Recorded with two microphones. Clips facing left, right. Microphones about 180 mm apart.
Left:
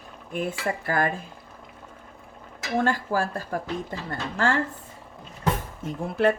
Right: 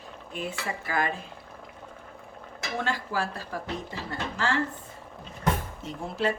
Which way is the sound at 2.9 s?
50° left (ahead or behind).